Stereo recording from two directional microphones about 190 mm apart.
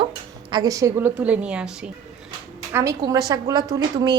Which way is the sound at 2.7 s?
15° right (ahead or behind).